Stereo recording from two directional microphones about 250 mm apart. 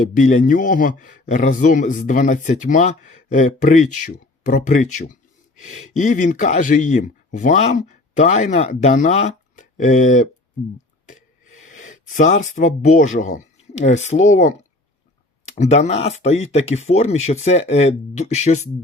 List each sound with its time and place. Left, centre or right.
0.2 s a man's voice: left
11.6 s a sound: left
12.5 s speech: left